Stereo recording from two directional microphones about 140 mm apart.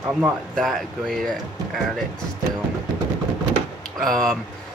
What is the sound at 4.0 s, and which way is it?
Speech, centre (ahead or behind).